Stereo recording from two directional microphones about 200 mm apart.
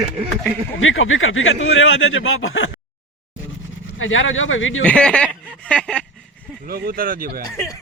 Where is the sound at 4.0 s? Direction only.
80° left.